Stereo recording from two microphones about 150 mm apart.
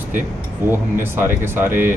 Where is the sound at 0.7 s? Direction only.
15° right (ahead or behind).